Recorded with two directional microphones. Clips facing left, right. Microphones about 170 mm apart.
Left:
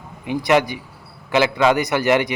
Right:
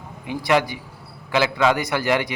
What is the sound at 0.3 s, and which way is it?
A man's voice, 20° left (ahead or behind).